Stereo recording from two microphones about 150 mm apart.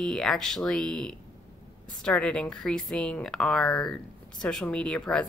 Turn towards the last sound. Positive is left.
turn(degrees=5)  # may be behind; listen again after turning